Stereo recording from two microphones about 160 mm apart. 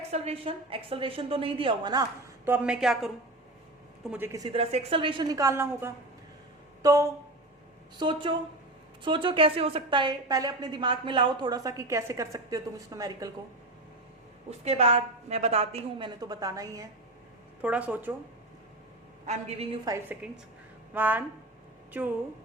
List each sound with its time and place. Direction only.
0.1 s a woman's voice: 35° right (ahead or behind)
2.5 s a woman's voice: 5° right (ahead or behind)
4.1 s a woman's voice: 15° right (ahead or behind)
4.5 s a woman's voice: 40° right (ahead or behind); by 13.3 s 20° right (ahead or behind)
14.6 s a woman's voice: 40° right (ahead or behind); by 16.9 s 20° right (ahead or behind)
17.6 s speech: 10° right (ahead or behind)
19.2 s a man's voice: 45° right (ahead or behind)
20.2 s speech: 5° right (ahead or behind)